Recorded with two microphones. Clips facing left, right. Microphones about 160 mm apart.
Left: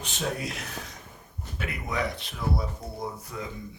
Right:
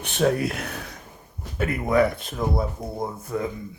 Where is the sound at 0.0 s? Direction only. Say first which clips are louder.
Right 10 dB; 60° right (ahead or behind).